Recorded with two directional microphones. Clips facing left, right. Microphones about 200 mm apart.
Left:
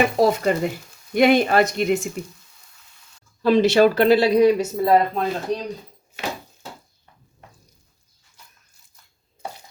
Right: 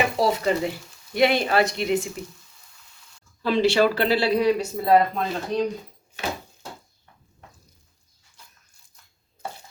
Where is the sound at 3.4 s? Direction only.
45° left (ahead or behind).